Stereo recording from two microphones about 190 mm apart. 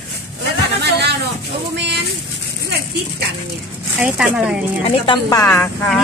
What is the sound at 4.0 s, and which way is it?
Speech, 5° right (ahead or behind).